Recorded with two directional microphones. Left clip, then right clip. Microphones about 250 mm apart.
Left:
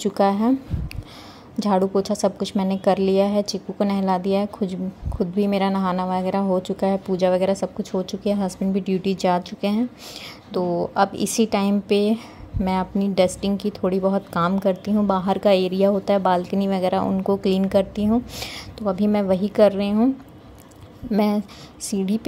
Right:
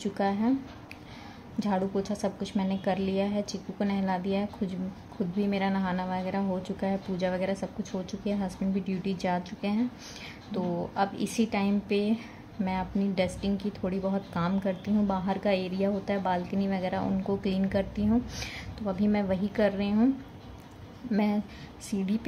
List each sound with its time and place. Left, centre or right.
0.0 s speech: left
1.6 s speech: left
21.1 s speech: left